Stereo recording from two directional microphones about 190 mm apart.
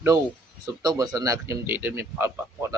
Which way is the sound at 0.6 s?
20° right (ahead or behind).